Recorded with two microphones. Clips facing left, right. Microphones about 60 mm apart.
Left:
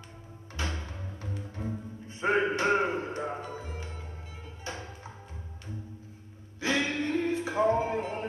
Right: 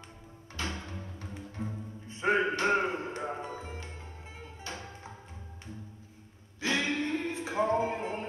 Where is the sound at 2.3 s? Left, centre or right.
Centre.